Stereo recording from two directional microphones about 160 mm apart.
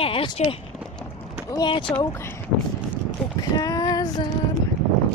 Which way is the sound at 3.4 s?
25° left (ahead or behind).